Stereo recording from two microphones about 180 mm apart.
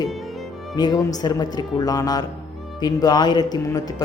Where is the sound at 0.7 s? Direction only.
20° left (ahead or behind).